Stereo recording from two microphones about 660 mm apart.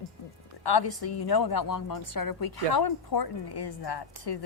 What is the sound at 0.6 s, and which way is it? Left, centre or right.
A woman's voice, left.